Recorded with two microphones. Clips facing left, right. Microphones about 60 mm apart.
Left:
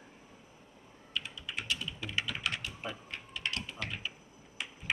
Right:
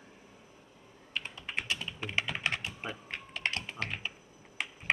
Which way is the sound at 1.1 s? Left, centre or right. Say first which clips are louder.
Right 2 dB; right.